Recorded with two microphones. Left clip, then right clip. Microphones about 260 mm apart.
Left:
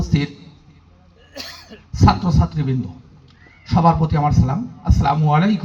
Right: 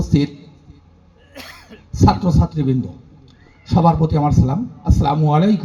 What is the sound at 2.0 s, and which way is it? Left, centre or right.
A man's voice, left.